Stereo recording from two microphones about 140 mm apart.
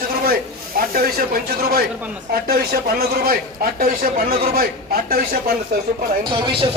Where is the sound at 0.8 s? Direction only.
90° right.